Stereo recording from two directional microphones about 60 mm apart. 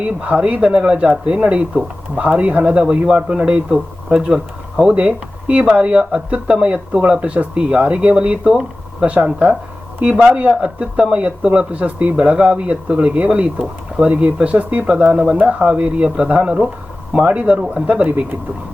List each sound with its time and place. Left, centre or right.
0.0 s speech: right